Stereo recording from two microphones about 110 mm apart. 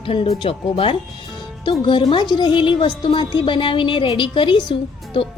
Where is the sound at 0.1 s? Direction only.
55° left (ahead or behind).